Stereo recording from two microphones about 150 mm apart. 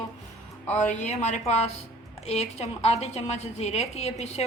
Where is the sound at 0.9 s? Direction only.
50° left (ahead or behind).